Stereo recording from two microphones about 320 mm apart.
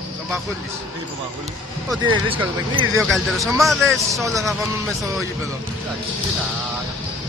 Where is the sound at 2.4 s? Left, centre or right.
Centre.